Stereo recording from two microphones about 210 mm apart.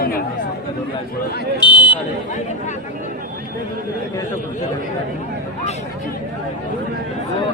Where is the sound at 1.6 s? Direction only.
20° left (ahead or behind).